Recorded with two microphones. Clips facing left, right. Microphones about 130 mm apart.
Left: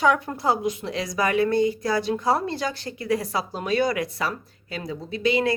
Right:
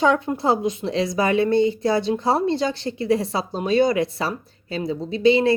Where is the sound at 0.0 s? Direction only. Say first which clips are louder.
Right 2 dB; 25° right (ahead or behind).